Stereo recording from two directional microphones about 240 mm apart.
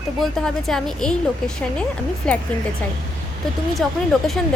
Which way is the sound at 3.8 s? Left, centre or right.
Centre.